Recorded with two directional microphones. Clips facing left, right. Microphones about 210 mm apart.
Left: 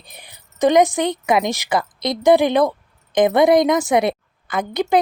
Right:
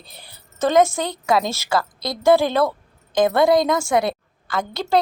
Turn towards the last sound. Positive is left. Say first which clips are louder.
# left 4 dB
turn(degrees=15)  # may be behind; listen again after turning